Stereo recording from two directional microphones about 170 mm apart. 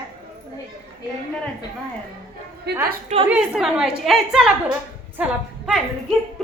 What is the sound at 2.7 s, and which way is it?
Speech, 80° right.